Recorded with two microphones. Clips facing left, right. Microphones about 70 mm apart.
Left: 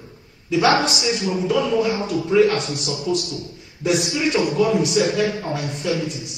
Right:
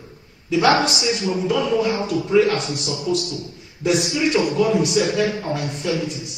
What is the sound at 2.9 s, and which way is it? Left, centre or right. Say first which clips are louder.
Speech: right 1 dB; right.